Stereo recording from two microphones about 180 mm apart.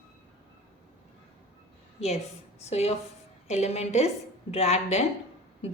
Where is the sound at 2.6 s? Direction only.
35° left (ahead or behind).